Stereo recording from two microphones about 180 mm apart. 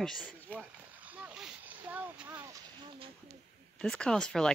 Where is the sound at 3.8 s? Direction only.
5° left (ahead or behind).